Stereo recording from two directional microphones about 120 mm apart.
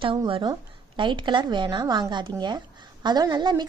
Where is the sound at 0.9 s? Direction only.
40° right (ahead or behind).